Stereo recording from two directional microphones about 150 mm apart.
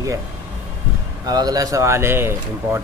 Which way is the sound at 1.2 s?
25° right (ahead or behind).